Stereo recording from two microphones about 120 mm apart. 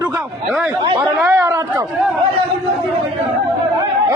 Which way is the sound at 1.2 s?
20° right (ahead or behind).